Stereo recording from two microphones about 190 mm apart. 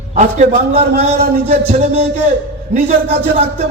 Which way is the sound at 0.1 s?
35° right (ahead or behind).